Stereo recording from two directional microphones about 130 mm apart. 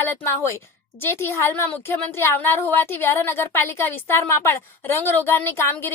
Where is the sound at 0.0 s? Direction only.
20° left (ahead or behind).